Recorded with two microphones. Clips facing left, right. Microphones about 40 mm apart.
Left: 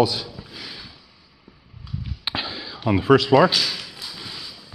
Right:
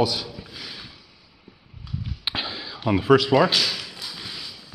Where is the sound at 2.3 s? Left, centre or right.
Right.